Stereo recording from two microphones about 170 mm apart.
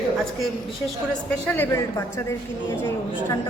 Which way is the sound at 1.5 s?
15° left (ahead or behind).